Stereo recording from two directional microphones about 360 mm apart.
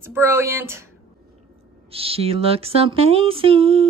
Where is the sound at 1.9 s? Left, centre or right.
Centre.